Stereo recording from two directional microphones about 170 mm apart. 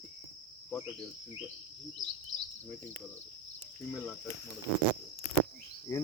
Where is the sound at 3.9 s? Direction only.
5° left (ahead or behind).